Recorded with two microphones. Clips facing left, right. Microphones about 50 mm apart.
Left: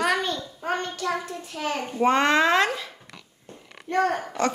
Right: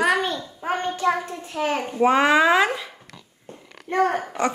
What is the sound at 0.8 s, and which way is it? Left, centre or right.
A child's voice, right.